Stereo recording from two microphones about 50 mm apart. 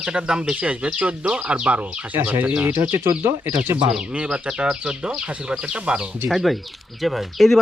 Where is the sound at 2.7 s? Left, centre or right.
Right.